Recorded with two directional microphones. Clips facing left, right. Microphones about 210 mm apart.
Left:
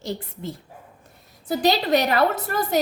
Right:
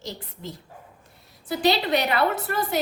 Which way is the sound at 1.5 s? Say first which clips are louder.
Left 2 dB; 40° left (ahead or behind).